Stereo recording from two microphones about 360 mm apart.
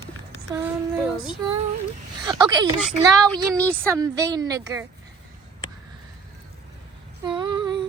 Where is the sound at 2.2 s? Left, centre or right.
Centre.